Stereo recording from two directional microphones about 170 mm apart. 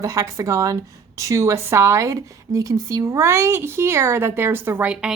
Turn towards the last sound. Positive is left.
turn(degrees=-10)  # may be behind; listen again after turning